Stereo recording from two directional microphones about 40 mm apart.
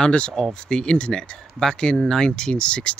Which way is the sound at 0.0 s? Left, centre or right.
Left.